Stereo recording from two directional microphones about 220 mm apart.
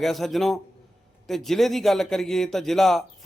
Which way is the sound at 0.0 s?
Centre (ahead or behind).